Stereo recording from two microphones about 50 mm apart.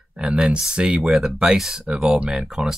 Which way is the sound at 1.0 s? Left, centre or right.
Centre.